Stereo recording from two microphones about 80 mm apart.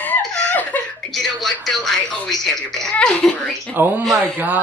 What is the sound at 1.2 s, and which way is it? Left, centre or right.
A child's voice, centre.